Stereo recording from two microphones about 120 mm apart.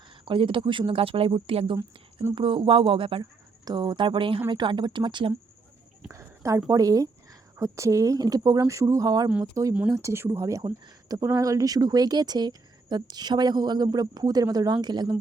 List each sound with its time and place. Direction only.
0.3 s speech: 45° right (ahead or behind)
6.1 s a sound: 25° right (ahead or behind)
6.7 s speech: 30° right (ahead or behind)